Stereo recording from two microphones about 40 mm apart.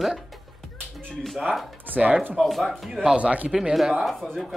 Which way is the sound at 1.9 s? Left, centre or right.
Centre.